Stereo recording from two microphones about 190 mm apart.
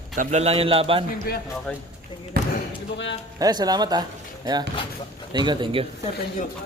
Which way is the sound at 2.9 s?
70° left (ahead or behind).